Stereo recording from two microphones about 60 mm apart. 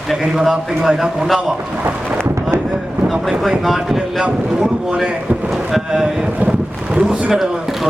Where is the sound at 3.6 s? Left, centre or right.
Centre.